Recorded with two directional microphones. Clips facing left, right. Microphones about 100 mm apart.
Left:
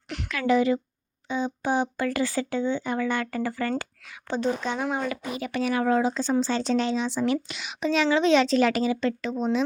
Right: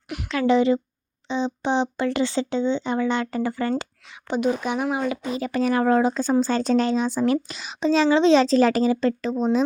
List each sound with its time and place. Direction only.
0.3 s speech: 25° right (ahead or behind)
5.1 s a woman's voice: 25° right (ahead or behind)